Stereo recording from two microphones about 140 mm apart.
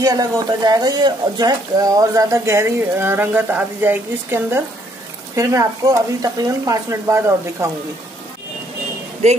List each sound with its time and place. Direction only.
0.0 s speech: 25° right (ahead or behind)
9.2 s speech: 50° right (ahead or behind)